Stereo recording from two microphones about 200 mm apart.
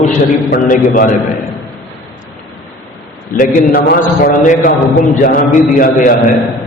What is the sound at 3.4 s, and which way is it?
Mantra, 50° left (ahead or behind).